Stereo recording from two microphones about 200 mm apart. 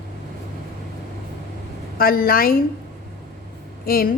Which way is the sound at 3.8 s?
45° left (ahead or behind).